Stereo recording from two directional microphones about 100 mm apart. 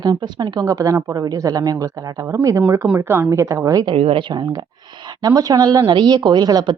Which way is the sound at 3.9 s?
65° right (ahead or behind).